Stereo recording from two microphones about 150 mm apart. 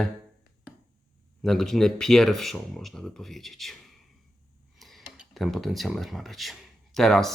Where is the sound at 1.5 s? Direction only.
5° left (ahead or behind).